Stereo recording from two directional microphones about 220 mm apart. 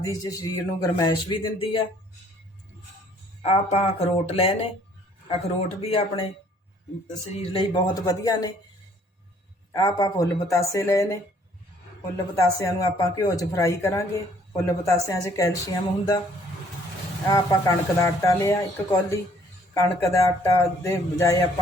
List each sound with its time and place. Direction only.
0.0 s speech: 15° left (ahead or behind)
3.4 s speech: 25° left (ahead or behind)
9.7 s speech: 15° left (ahead or behind)
12.4 s speech: 15° left (ahead or behind)
17.3 s speech: 15° left (ahead or behind)